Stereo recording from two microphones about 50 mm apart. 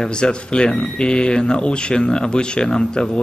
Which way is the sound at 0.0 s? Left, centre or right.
Centre.